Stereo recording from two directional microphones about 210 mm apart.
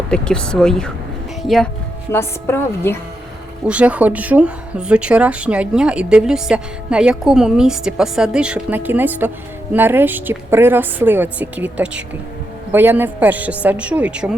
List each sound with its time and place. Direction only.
0.1 s a woman's voice: 5° left (ahead or behind)
3.7 s a woman's voice: 5° right (ahead or behind)